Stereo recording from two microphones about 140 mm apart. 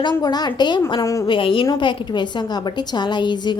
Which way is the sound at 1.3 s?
40° left (ahead or behind).